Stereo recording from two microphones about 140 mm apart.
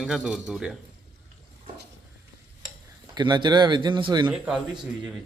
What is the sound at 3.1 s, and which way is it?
Speech, 30° right (ahead or behind).